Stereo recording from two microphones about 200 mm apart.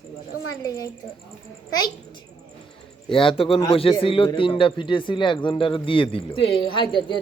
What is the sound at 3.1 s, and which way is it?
A man's voice, 25° left (ahead or behind).